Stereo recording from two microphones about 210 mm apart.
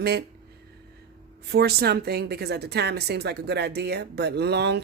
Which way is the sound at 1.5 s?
50° right (ahead or behind).